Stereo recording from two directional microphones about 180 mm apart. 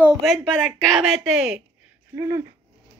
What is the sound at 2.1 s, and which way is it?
Speech, 15° right (ahead or behind).